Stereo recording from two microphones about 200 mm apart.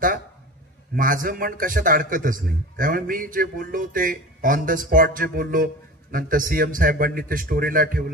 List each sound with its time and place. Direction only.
0.9 s a man's voice: 45° right (ahead or behind)